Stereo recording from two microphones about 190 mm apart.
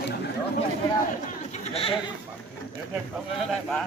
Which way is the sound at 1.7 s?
30° left (ahead or behind).